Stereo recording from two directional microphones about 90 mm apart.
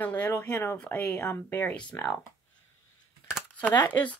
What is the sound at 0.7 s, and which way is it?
Speech, 15° left (ahead or behind).